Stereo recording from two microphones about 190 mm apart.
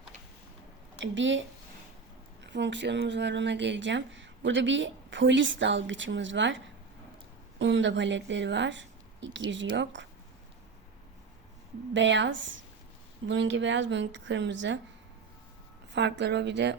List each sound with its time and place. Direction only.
0.9 s speech: 75° right (ahead or behind)
7.6 s speech: 70° right (ahead or behind)
11.9 s speech: 70° right (ahead or behind)
15.9 s speech: 65° right (ahead or behind)